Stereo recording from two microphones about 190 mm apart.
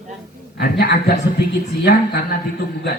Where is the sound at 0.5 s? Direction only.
55° left (ahead or behind).